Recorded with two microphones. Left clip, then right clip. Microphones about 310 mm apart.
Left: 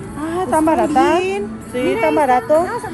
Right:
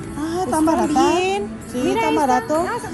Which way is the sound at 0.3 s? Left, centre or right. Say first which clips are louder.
Left 3 dB; right.